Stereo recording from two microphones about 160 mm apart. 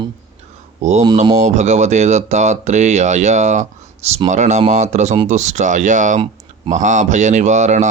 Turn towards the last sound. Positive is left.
turn(degrees=-45)  # may be behind; listen again after turning